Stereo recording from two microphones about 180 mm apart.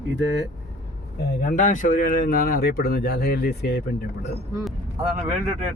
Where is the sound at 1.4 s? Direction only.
45° left (ahead or behind); by 4.3 s 65° left (ahead or behind).